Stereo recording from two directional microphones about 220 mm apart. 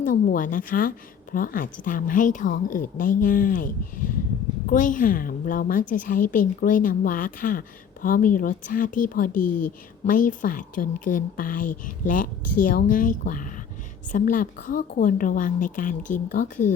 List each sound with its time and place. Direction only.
0.0 s a woman's voice: 40° left (ahead or behind)